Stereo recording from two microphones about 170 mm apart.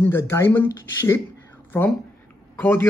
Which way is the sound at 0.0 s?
15° left (ahead or behind).